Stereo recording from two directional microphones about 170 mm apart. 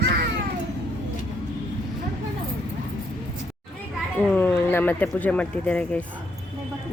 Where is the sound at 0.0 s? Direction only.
75° right (ahead or behind).